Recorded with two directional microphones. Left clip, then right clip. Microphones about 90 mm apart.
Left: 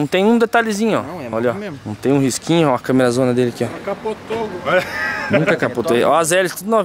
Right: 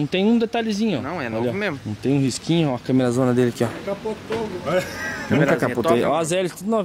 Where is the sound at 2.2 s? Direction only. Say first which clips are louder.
Left 5 dB; 45° left (ahead or behind).